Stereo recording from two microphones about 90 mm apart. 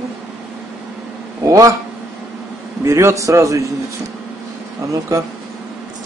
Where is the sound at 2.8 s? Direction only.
35° right (ahead or behind).